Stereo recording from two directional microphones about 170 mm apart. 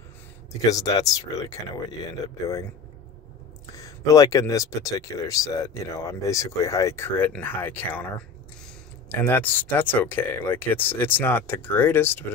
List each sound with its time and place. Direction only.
0.7 s speech: 20° left (ahead or behind)
3.7 s speech: 20° left (ahead or behind)
9.1 s speech: 10° left (ahead or behind)